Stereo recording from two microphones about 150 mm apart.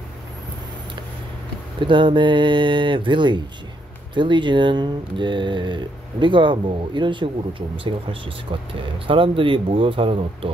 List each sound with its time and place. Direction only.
1.8 s speech: 35° right (ahead or behind)